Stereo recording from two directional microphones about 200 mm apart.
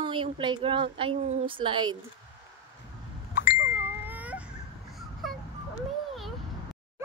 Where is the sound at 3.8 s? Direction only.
10° right (ahead or behind).